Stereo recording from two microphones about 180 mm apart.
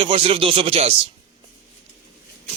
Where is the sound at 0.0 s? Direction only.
30° right (ahead or behind).